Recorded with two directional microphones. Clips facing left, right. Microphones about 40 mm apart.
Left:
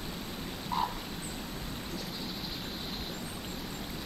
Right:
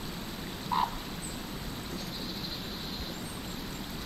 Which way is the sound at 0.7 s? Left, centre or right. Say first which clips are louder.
Right 3 dB; right.